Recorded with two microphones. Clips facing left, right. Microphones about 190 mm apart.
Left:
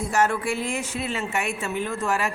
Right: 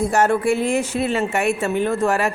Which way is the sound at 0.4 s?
60° right (ahead or behind).